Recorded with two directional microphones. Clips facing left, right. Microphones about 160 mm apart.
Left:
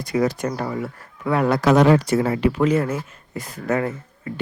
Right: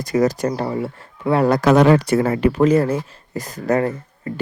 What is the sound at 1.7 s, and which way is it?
Speech, 60° right (ahead or behind).